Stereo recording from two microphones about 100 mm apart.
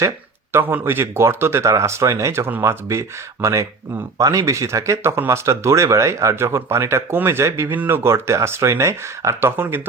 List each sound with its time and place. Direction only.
0.5 s speech: 20° right (ahead or behind)